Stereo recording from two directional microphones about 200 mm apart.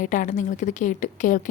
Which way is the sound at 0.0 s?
40° left (ahead or behind).